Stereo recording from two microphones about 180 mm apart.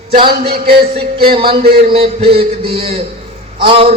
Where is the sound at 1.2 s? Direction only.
30° right (ahead or behind).